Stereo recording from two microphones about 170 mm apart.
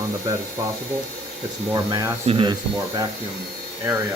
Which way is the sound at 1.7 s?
25° right (ahead or behind).